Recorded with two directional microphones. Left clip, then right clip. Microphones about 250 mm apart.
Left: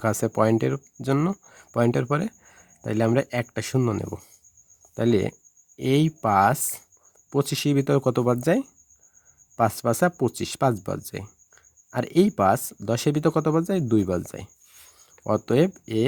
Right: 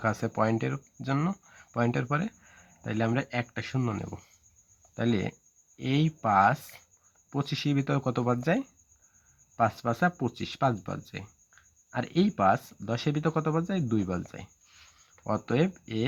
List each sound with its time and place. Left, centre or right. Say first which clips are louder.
0.0 s speech: left 6 dB; left